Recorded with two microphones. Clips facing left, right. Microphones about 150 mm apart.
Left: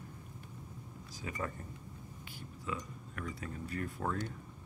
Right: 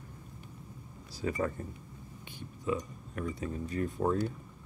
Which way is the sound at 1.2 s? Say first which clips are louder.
Right 10 dB; 35° right (ahead or behind).